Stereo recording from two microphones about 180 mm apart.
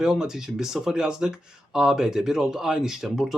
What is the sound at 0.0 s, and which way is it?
Speech, centre (ahead or behind).